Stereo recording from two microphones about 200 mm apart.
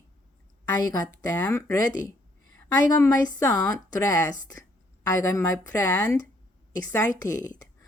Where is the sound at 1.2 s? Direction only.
20° left (ahead or behind).